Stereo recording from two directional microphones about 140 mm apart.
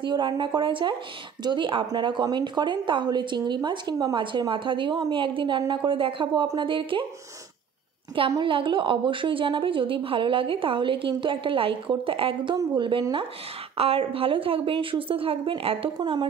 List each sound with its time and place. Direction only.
0.0 s a woman's voice: 35° right (ahead or behind)
8.3 s a woman's voice: 35° right (ahead or behind)